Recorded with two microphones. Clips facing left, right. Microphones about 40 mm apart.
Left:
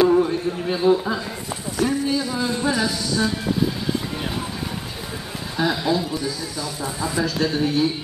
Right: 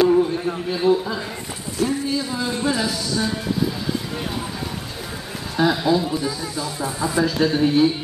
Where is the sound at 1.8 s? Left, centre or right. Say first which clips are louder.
Even; centre.